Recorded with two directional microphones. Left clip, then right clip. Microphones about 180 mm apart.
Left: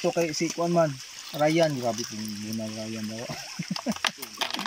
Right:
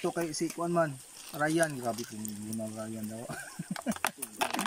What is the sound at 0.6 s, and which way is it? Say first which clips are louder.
Speech: left 6 dB; 10° left (ahead or behind).